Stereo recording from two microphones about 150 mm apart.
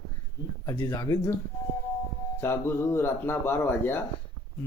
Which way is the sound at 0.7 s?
30° left (ahead or behind).